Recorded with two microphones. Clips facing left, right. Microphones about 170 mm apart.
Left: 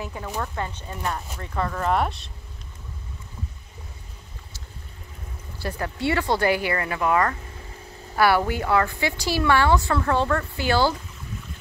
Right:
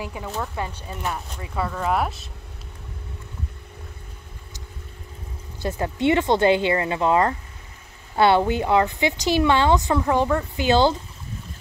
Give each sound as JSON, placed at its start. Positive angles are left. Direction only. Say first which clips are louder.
{"t": 0.0, "sound": "speech", "louder": "right 1 dB", "side_deg": -15}
{"t": 5.6, "sound": "a woman's voice", "louder": "right 4 dB", "side_deg": -20}